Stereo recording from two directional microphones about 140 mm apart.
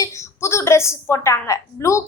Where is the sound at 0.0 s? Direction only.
20° left (ahead or behind).